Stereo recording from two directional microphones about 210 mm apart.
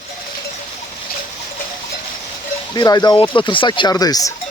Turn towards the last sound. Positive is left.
turn(degrees=15)  # may be behind; listen again after turning